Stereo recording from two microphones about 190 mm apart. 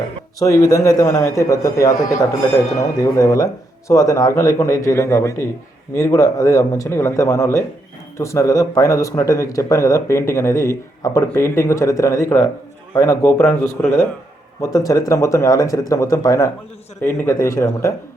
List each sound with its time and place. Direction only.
0.3 s speech: 15° left (ahead or behind)